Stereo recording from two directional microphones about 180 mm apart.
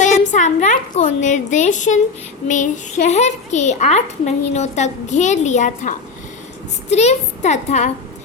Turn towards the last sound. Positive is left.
turn(degrees=40)  # may be behind; listen again after turning